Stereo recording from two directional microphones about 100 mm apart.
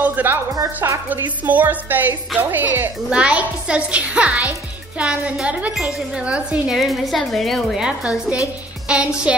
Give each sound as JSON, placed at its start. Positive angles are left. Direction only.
{"t": 0.0, "sound": "a woman's voice", "side_deg": -15}
{"t": 6.8, "sound": "a woman's voice", "side_deg": 0}